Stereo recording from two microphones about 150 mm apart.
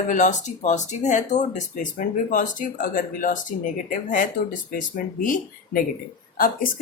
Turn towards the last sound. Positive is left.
turn(degrees=70)  # may be behind; listen again after turning